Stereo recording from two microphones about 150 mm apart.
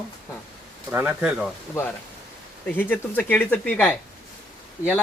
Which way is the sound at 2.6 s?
10° left (ahead or behind).